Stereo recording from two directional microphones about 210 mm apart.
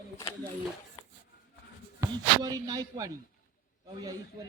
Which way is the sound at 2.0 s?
15° right (ahead or behind).